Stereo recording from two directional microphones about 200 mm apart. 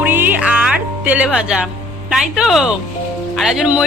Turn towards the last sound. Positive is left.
turn(degrees=-5)  # may be behind; listen again after turning